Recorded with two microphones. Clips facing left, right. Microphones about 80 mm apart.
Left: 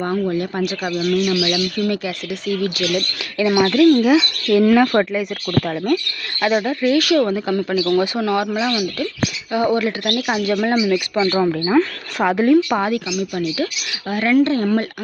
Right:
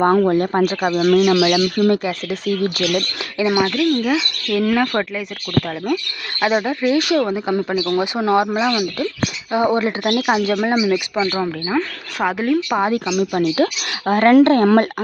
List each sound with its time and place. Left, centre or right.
0.0 s speech: right
3.7 s speech: centre
5.6 s speech: centre
11.3 s speech: centre
12.9 s speech: right